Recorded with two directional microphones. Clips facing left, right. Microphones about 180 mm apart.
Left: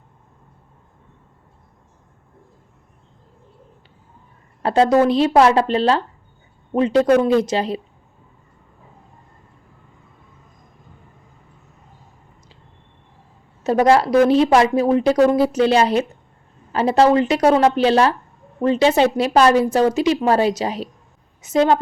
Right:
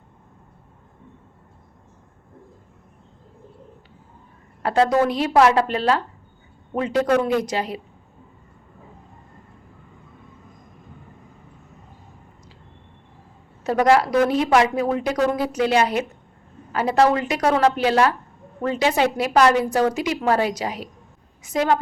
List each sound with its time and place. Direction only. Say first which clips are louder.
4.6 s a woman's voice: left 4 dB; 25° left (ahead or behind)
13.7 s a woman's voice: left 3 dB; 25° left (ahead or behind)